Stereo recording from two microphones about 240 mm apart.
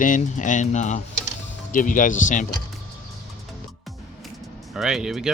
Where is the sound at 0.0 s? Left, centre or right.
Left.